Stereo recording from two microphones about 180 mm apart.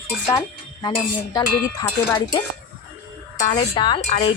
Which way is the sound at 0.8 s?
25° left (ahead or behind).